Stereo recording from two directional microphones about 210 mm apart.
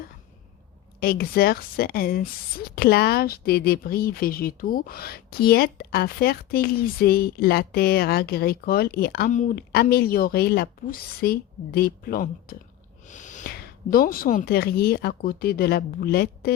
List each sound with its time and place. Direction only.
0.9 s speech: 45° left (ahead or behind)